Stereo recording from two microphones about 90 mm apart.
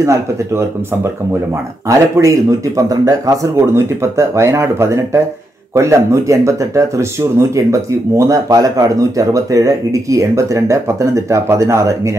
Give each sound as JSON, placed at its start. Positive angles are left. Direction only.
{"t": 0.0, "sound": "speech", "side_deg": -35}
{"t": 1.9, "sound": "speech", "side_deg": -35}
{"t": 3.7, "sound": "speech", "side_deg": -30}